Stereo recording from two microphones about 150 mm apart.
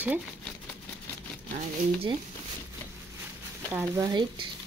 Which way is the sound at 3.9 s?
25° right (ahead or behind).